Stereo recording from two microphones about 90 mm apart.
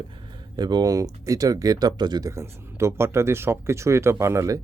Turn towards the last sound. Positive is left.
turn(degrees=-35)  # may be behind; listen again after turning